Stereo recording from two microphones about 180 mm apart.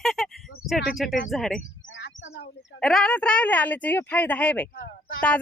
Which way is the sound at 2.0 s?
70° left (ahead or behind).